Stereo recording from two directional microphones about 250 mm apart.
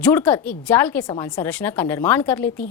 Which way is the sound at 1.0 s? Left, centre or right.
Centre.